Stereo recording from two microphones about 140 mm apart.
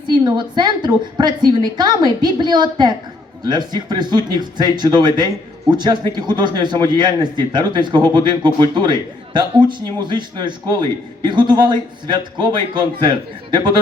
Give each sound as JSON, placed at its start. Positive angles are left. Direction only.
{"t": 0.0, "sound": "a man's voice", "side_deg": -35}